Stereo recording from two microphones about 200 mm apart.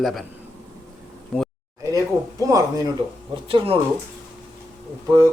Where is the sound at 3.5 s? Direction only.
25° right (ahead or behind).